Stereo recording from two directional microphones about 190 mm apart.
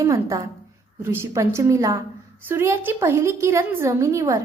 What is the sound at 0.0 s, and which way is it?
A woman's voice, 15° right (ahead or behind).